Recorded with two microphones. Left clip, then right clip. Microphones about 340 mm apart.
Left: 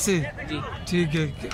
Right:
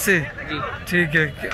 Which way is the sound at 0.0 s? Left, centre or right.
Centre.